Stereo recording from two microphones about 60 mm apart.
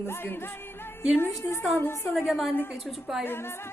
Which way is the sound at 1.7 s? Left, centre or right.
Left.